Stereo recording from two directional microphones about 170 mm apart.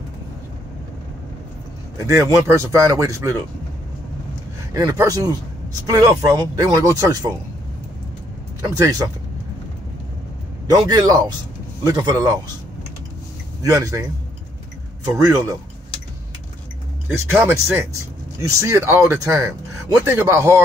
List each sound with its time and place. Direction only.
2.0 s speech: 20° right (ahead or behind)
4.7 s speech: 20° right (ahead or behind)
8.6 s speech: 20° right (ahead or behind)
10.7 s speech: 25° right (ahead or behind)
13.6 s speech: 20° right (ahead or behind)
15.1 s speech: 20° right (ahead or behind)
17.1 s speech: 15° right (ahead or behind)